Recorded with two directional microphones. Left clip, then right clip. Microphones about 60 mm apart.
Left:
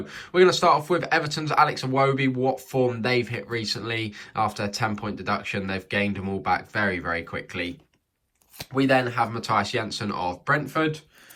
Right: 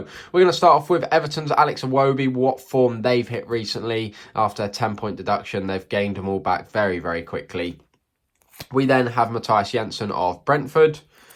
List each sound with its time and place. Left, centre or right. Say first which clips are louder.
0.0 s speech: right 2 dB; right
9.0 s speech: right 4 dB; right
9.4 s speech: right 4 dB; right